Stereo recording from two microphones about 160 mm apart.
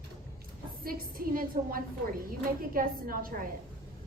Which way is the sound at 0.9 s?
65° right (ahead or behind).